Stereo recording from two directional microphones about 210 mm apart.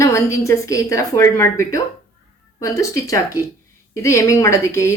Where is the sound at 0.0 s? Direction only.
15° left (ahead or behind).